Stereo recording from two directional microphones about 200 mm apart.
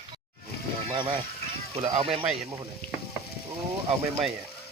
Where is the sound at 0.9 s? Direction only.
25° right (ahead or behind).